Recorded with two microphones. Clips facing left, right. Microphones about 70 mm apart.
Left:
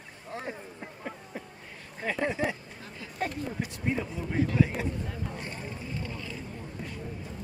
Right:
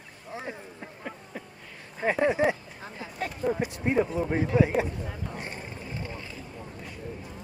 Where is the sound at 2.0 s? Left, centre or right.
Right.